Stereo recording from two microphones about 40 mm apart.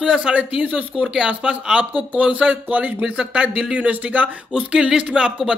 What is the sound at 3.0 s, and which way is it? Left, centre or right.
Speech, right.